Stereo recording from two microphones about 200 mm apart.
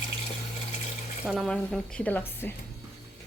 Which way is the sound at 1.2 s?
Centre (ahead or behind).